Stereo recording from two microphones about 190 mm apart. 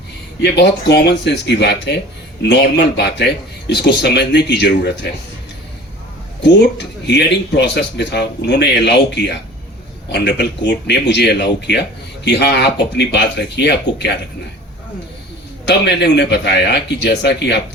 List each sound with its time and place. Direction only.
0.4 s speech: 60° left (ahead or behind)
6.4 s speech: 65° left (ahead or behind)
15.6 s speech: 65° left (ahead or behind)